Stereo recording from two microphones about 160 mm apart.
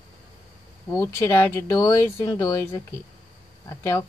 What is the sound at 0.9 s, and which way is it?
Speech, 20° left (ahead or behind).